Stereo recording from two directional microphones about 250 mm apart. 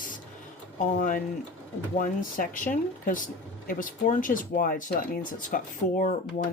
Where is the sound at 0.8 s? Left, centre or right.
Left.